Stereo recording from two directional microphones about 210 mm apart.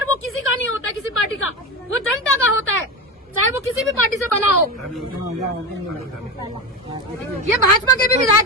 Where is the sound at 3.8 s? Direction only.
Centre (ahead or behind).